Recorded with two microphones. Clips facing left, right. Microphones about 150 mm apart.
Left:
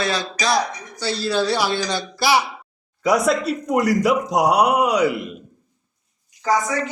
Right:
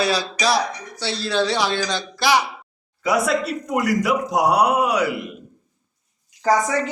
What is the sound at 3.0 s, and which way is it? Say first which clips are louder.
Speech: left 2 dB; 25° left (ahead or behind).